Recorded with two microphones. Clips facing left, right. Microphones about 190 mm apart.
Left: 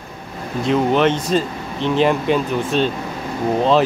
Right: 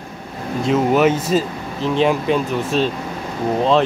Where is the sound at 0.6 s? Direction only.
5° right (ahead or behind).